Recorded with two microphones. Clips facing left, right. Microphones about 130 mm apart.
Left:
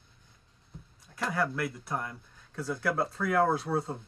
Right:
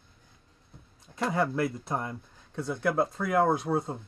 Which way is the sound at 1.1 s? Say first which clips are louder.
Right 3 dB; 25° right (ahead or behind).